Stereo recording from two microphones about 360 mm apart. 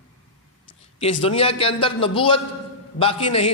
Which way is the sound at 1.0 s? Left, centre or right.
Centre.